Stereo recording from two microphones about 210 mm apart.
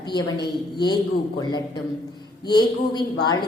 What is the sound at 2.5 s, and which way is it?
Speech, 20° left (ahead or behind).